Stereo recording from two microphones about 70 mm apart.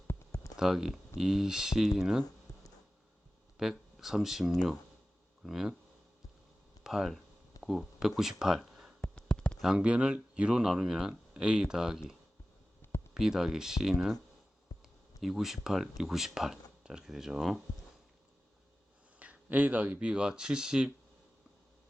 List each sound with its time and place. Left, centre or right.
0.6 s speech: centre
2.5 s a sound: left
3.6 s speech: centre
6.8 s speech: centre
9.0 s a sound: centre
9.6 s speech: centre
13.1 s speech: centre
15.2 s speech: centre
19.2 s speech: right